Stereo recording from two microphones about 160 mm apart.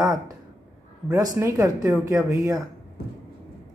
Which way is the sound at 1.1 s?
20° right (ahead or behind).